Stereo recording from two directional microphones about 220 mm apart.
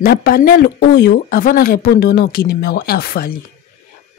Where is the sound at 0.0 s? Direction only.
45° left (ahead or behind).